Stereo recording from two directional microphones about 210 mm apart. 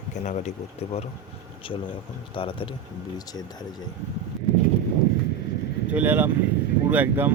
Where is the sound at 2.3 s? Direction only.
25° left (ahead or behind).